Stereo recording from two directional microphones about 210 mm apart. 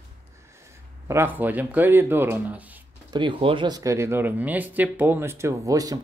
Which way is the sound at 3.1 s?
20° right (ahead or behind).